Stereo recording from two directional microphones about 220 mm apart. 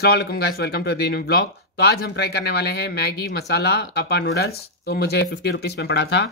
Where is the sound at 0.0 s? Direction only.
45° left (ahead or behind).